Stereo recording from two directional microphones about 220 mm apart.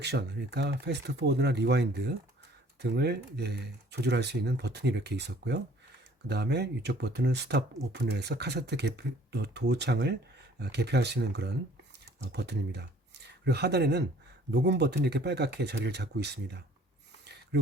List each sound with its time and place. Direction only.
0.0 s speech: 50° right (ahead or behind)